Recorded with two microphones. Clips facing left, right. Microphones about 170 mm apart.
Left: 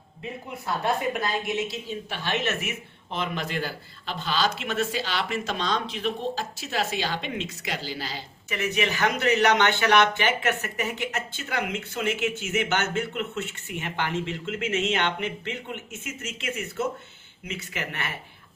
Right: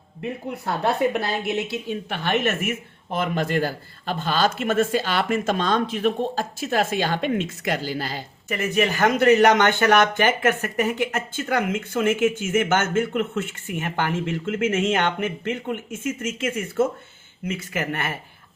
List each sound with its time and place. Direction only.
0.2 s speech: 60° right (ahead or behind)